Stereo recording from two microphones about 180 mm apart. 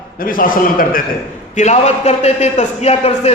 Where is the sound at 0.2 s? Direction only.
50° left (ahead or behind).